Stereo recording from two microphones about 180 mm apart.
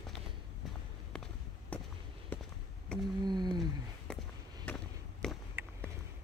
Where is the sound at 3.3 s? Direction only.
25° right (ahead or behind).